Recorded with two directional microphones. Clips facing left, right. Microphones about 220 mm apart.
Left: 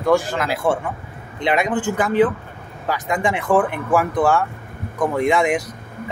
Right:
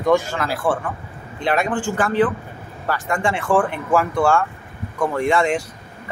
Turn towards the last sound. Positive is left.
turn(degrees=20)  # may be behind; listen again after turning